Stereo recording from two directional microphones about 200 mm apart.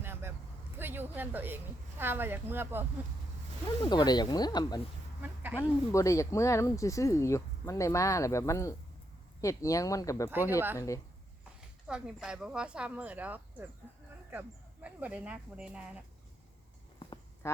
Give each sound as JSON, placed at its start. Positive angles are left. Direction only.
{"t": 0.0, "sound": "vehicle", "side_deg": -10}
{"t": 0.8, "sound": "a woman's voice", "side_deg": -10}
{"t": 3.8, "sound": "speech", "side_deg": 20}
{"t": 5.2, "sound": "a sound", "side_deg": -10}
{"t": 5.5, "sound": "speech", "side_deg": 15}
{"t": 11.9, "sound": "speech", "side_deg": -5}
{"t": 17.4, "sound": "speech", "side_deg": 15}